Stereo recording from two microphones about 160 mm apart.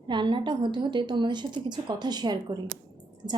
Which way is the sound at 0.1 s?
30° right (ahead or behind).